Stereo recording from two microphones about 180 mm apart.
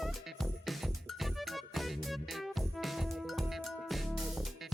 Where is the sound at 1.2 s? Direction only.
Centre (ahead or behind).